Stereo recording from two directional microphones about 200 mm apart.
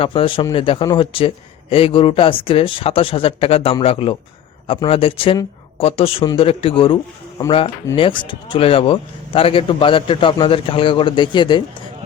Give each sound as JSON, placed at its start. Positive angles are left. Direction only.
{"t": 0.0, "sound": "a man's voice", "side_deg": 25}